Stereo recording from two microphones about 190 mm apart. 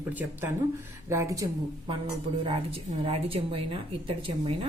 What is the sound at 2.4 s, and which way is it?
A woman's voice, 30° right (ahead or behind).